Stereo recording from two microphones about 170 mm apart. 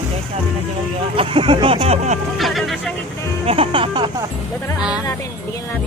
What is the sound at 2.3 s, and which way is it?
Speech, centre (ahead or behind).